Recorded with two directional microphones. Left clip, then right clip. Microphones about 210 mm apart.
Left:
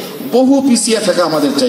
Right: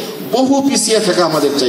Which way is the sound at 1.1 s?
50° left (ahead or behind).